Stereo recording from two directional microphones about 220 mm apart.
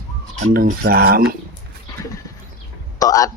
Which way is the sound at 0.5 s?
40° right (ahead or behind).